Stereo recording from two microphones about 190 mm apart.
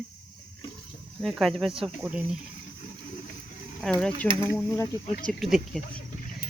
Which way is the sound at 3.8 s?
5° left (ahead or behind).